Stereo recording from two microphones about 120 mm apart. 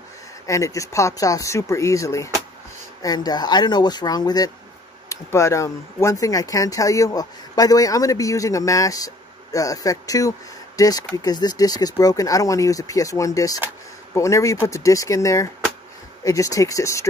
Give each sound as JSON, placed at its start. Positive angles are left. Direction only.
{"t": 0.5, "sound": "speech", "side_deg": 25}